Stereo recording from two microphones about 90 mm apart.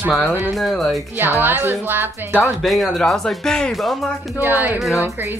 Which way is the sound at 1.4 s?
20° right (ahead or behind).